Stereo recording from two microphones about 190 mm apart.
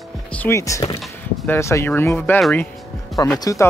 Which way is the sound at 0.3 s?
10° left (ahead or behind).